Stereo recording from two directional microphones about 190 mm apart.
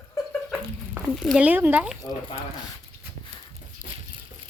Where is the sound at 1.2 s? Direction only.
Centre (ahead or behind).